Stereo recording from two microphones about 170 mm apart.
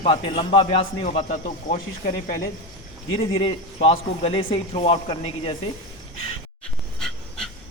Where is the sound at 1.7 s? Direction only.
55° left (ahead or behind).